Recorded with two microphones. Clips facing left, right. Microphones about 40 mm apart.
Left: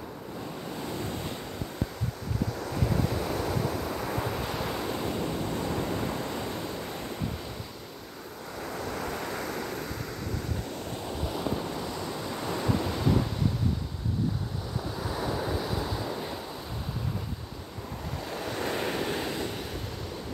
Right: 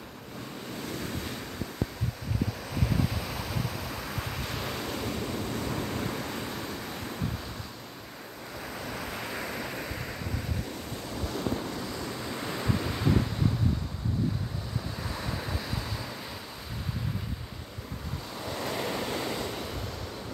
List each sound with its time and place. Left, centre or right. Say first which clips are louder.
0.8 s waves: left 1 dB; centre
2.6 s waves: left 2 dB; centre
8.6 s waves: left 4 dB; centre
11.2 s waves: even; centre
15.0 s waves: left 7 dB; centre
18.3 s waves: left 2 dB; centre